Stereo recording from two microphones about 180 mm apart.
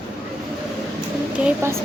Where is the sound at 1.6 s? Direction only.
15° right (ahead or behind).